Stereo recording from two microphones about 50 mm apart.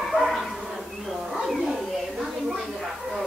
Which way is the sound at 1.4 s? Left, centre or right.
Centre.